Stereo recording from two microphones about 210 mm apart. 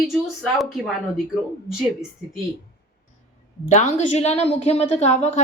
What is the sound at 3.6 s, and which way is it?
A woman's voice, 35° left (ahead or behind).